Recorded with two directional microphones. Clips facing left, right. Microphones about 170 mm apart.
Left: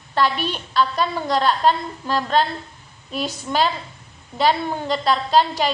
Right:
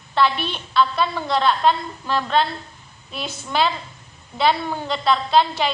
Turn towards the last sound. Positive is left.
turn(degrees=40)  # may be behind; listen again after turning